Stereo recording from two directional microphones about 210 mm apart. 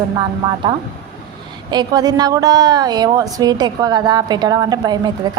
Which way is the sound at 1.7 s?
20° right (ahead or behind).